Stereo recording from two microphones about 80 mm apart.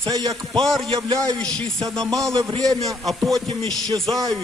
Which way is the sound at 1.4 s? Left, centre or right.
Centre.